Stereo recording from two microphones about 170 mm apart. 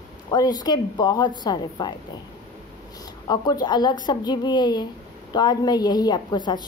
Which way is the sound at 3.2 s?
25° left (ahead or behind).